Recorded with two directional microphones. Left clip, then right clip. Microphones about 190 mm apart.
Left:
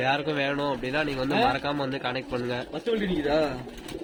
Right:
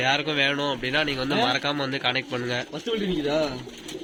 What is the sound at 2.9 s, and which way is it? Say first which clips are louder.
Speech: left 1 dB; 50° right (ahead or behind).